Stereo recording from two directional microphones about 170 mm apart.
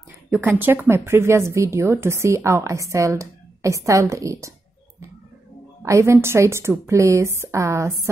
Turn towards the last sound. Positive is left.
turn(degrees=-15)  # may be behind; listen again after turning